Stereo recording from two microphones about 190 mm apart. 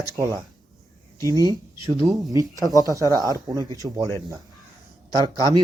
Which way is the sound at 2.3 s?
20° right (ahead or behind).